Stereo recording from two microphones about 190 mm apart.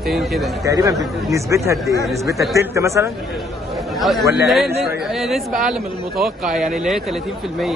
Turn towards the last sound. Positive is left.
turn(degrees=0)  # may be behind; listen again after turning